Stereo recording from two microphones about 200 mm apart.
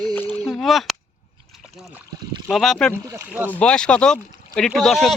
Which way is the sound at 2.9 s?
15° right (ahead or behind).